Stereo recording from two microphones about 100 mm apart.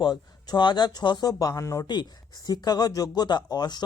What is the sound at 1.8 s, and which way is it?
Speech, 45° left (ahead or behind).